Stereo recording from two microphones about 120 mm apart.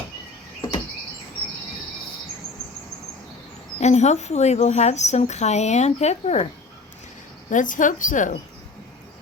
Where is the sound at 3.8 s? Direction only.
70° left (ahead or behind).